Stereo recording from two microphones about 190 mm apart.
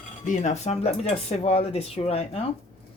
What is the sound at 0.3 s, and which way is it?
Speech, 40° left (ahead or behind).